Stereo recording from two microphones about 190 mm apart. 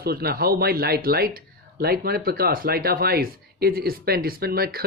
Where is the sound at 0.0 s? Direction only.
55° right (ahead or behind).